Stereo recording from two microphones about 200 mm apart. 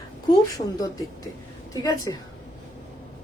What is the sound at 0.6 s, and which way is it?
Speech, 30° left (ahead or behind).